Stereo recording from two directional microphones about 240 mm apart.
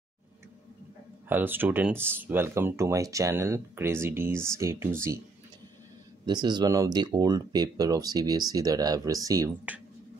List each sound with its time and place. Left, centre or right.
1.3 s speech: centre
6.2 s speech: centre